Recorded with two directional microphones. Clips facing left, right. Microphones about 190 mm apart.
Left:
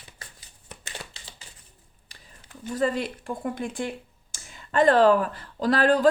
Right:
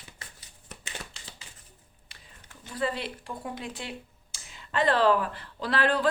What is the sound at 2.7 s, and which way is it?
Speech, 45° left (ahead or behind).